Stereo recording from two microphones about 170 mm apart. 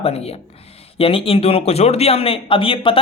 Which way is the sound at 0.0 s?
35° left (ahead or behind).